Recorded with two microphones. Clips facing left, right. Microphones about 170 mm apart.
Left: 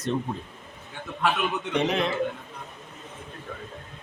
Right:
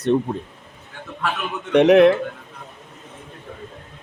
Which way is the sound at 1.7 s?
65° right (ahead or behind).